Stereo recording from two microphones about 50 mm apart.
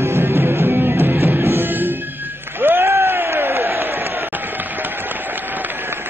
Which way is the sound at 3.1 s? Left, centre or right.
Right.